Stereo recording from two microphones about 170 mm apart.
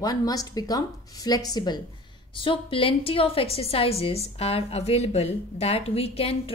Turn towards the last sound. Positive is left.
turn(degrees=35)  # may be behind; listen again after turning